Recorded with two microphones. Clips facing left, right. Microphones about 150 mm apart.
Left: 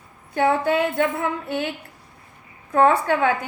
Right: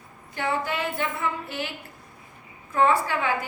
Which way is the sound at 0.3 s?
55° left (ahead or behind).